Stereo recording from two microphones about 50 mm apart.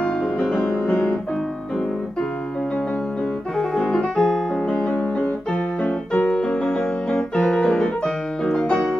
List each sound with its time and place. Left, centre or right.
0.0 s music: centre
3.5 s piano: centre
4.8 s keyboard: left
7.3 s piano: centre
8.5 s music: centre